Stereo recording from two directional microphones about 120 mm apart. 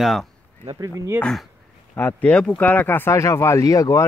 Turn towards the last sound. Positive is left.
turn(degrees=25)  # may be behind; listen again after turning